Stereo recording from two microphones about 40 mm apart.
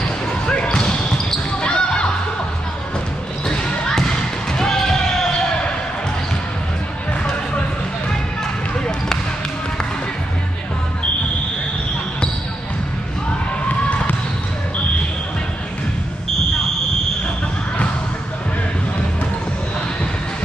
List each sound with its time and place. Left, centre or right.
0.5 s basketball bounce: left
3.4 s basketball bounce: centre